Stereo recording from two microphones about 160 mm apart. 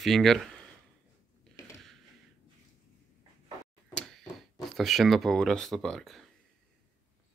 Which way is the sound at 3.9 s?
Centre (ahead or behind).